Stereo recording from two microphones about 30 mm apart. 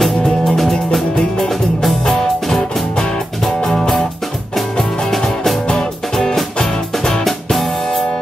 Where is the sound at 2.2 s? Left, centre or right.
Centre.